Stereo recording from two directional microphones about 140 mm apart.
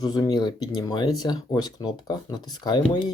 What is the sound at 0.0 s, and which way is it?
Speech, 30° left (ahead or behind).